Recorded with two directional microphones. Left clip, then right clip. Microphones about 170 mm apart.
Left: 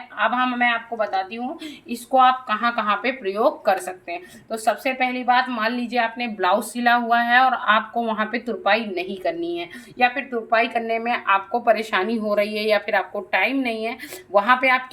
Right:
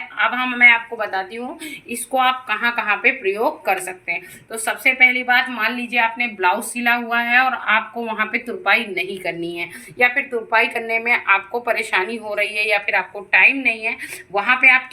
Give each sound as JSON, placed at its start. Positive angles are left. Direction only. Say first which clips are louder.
{"t": 0.2, "sound": "a woman's voice", "louder": "right 5 dB", "side_deg": 15}
{"t": 1.9, "sound": "speech", "louder": "left 2 dB", "side_deg": 15}
{"t": 12.3, "sound": "a woman's voice", "louder": "right 1 dB", "side_deg": 60}